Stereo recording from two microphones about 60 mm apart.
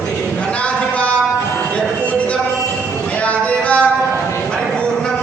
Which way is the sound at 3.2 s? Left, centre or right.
Left.